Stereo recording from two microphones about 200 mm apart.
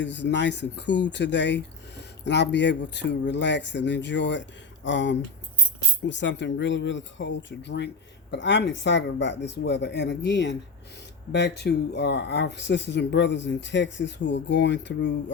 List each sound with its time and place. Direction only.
0.0 s speech: 60° left (ahead or behind)